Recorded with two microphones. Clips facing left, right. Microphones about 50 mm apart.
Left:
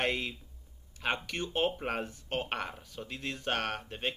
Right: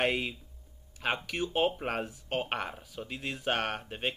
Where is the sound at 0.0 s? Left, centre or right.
Centre.